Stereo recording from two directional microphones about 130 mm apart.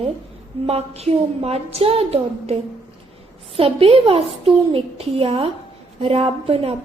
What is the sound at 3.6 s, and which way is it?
A woman's voice, 45° right (ahead or behind).